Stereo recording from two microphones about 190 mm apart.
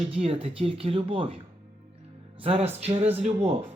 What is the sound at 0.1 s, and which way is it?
Speech, 30° right (ahead or behind).